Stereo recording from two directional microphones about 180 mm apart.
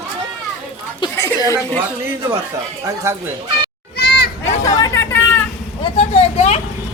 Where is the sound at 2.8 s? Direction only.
15° right (ahead or behind).